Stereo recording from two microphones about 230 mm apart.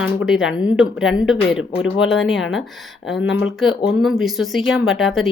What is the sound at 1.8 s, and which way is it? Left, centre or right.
Speech, left.